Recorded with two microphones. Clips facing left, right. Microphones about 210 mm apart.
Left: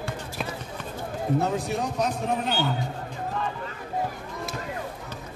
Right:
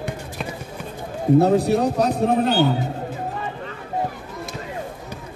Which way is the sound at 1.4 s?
35° right (ahead or behind).